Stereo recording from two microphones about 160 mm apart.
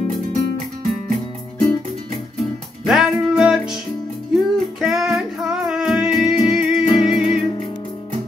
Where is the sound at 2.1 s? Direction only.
Centre (ahead or behind).